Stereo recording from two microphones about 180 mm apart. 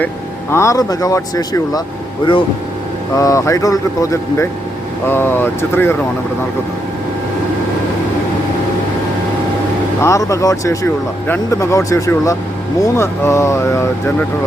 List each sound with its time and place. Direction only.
0.5 s speech: 15° left (ahead or behind)
3.2 s speech: 20° left (ahead or behind)
10.0 s speech: 15° left (ahead or behind)